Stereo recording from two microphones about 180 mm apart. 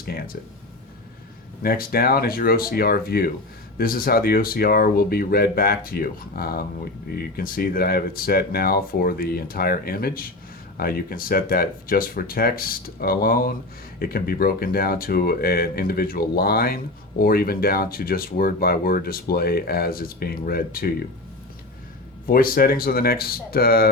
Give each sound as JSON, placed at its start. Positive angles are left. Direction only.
{"t": 1.6, "sound": "speech", "side_deg": 55}
{"t": 22.3, "sound": "speech", "side_deg": 55}